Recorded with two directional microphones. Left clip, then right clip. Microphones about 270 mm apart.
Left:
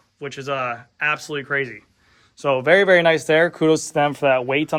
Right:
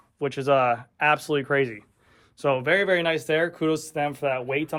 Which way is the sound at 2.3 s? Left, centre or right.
Centre.